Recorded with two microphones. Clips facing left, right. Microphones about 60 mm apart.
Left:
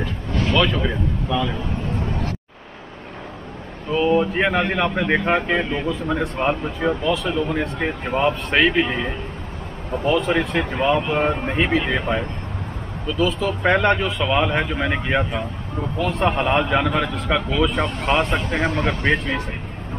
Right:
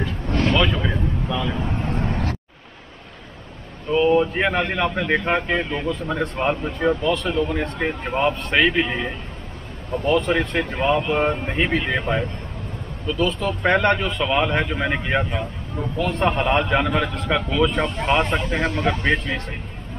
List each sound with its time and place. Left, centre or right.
0.6 s speech: centre
1.9 s vehicle: right
3.9 s speech: centre